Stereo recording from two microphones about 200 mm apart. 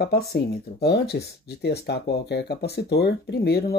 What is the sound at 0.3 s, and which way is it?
Speech, 55° left (ahead or behind).